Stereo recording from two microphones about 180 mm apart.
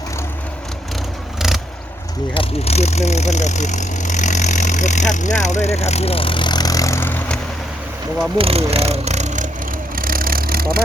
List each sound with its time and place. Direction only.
1.4 s vehicle: centre (ahead or behind)
2.3 s speech: 35° left (ahead or behind); by 7.3 s 10° left (ahead or behind)
8.4 s speech: 35° right (ahead or behind)
9.9 s vehicle: 55° right (ahead or behind)